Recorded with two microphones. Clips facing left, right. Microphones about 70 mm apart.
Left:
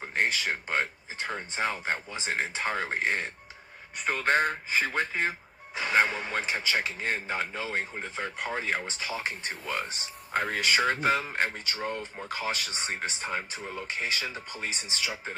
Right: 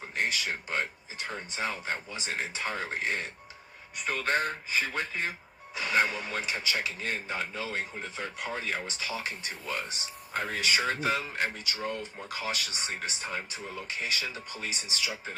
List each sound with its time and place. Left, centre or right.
0.1 s speech: left